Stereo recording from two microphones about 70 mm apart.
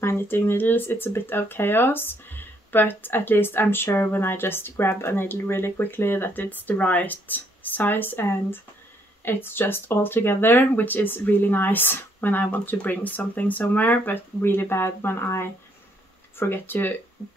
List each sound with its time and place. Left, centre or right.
0.0 s speech: left